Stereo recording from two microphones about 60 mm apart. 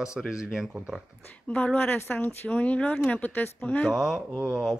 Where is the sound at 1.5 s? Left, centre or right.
Left.